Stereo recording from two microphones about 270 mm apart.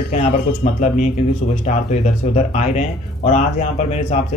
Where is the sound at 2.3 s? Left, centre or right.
Left.